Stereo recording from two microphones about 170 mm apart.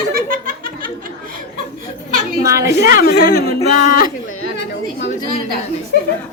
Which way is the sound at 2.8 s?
65° left (ahead or behind).